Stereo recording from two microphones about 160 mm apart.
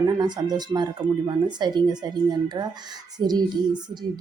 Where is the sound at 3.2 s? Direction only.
25° right (ahead or behind).